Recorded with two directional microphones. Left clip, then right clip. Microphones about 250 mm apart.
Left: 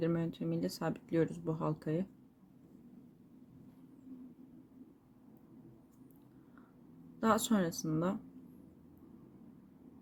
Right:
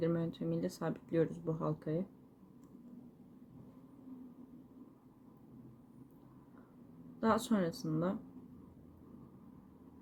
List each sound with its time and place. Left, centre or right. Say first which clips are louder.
0.0 s speech: even; centre
7.2 s speech: left 1 dB; centre